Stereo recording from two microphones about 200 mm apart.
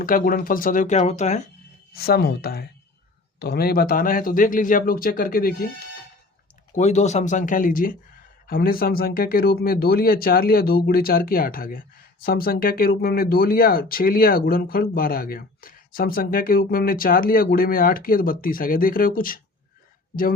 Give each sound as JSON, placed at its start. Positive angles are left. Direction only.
{"t": 0.0, "sound": "speech", "side_deg": 45}
{"t": 1.9, "sound": "speech", "side_deg": 50}
{"t": 6.7, "sound": "speech", "side_deg": 35}